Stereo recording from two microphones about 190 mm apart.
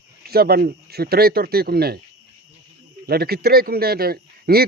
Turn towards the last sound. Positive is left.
turn(degrees=-55)  # may be behind; listen again after turning